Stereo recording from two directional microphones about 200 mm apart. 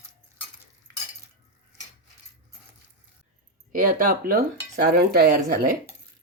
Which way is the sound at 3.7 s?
45° right (ahead or behind).